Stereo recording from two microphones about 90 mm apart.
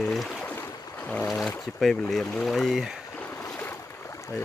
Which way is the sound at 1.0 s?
15° left (ahead or behind).